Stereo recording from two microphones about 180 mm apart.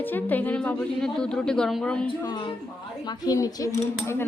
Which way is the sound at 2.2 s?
25° left (ahead or behind).